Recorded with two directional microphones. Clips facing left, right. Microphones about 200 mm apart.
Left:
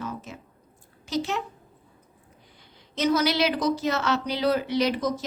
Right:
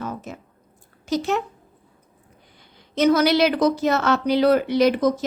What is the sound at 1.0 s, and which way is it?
Speech, 45° right (ahead or behind).